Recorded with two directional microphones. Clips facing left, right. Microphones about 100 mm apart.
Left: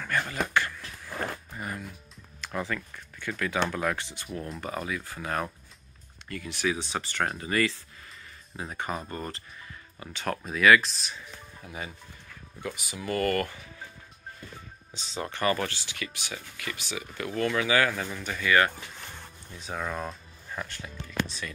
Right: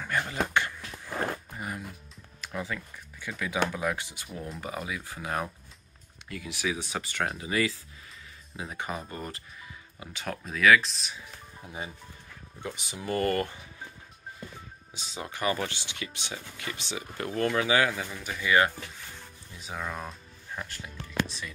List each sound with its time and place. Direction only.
0.0 s a sound: 15° right (ahead or behind)
1.6 s music: 15° right (ahead or behind)
2.4 s speech: 5° right (ahead or behind)
11.6 s speech: 25° right (ahead or behind)
15.0 s speech: 10° right (ahead or behind); by 17.6 s 35° right (ahead or behind)
17.6 s speech: 20° right (ahead or behind)
18.1 s speech: 5° right (ahead or behind)
18.4 s speech: 20° right (ahead or behind)
19.6 s speech: centre (ahead or behind)